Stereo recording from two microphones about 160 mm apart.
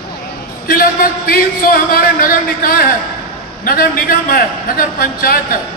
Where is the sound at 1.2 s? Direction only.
70° left (ahead or behind).